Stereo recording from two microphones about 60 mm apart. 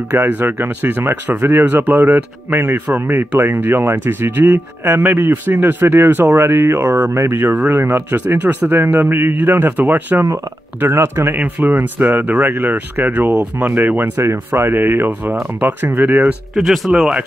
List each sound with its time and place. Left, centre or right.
0.1 s speech: right
7.4 s speech: right
7.7 s speech: right
14.2 s speech: right
16.5 s speech: centre